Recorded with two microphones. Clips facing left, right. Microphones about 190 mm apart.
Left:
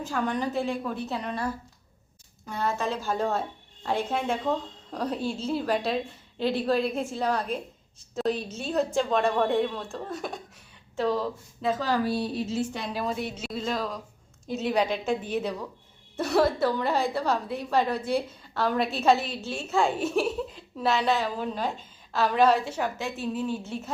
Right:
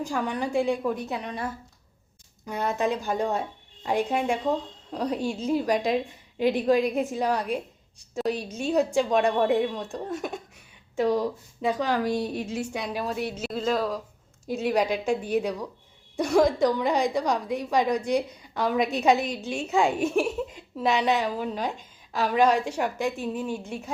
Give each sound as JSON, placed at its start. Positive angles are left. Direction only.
{"t": 0.0, "sound": "a woman's voice", "side_deg": -10}
{"t": 2.5, "sound": "a woman's voice", "side_deg": -15}